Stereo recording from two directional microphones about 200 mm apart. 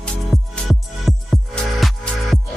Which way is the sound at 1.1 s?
Centre (ahead or behind).